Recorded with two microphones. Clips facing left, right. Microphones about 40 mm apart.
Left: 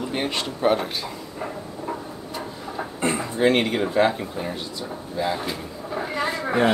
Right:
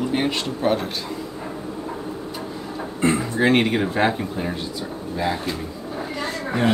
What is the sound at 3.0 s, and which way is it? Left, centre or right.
Speech, centre.